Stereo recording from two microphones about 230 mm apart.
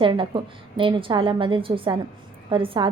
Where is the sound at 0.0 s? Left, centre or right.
Right.